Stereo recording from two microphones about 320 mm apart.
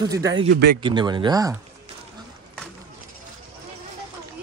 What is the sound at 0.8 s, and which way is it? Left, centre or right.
Speech, centre.